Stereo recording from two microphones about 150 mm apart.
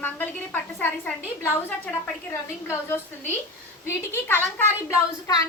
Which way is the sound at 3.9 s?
15° left (ahead or behind).